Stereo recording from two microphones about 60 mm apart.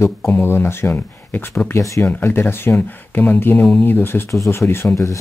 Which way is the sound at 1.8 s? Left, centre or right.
Left.